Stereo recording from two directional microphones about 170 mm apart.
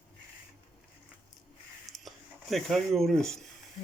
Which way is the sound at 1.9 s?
Centre (ahead or behind).